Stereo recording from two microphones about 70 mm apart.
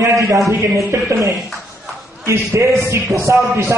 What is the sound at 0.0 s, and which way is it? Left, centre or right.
A man's voice, right.